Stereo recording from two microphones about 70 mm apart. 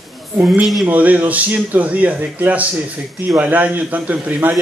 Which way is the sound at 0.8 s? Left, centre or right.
Right.